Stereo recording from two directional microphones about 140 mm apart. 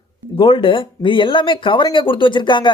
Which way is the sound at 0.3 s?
40° left (ahead or behind).